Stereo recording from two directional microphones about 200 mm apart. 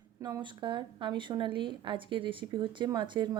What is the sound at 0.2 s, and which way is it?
A woman's voice, 20° right (ahead or behind).